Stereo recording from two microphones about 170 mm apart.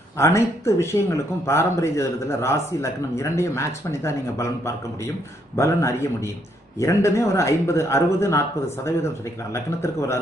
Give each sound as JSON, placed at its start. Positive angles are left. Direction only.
{"t": 0.2, "sound": "speech", "side_deg": 15}
{"t": 9.5, "sound": "speech", "side_deg": 15}